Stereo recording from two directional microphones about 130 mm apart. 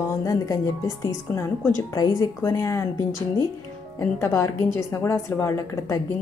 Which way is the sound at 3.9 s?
20° left (ahead or behind).